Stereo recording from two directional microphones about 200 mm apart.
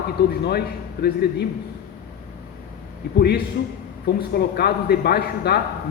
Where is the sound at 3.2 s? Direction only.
55° left (ahead or behind).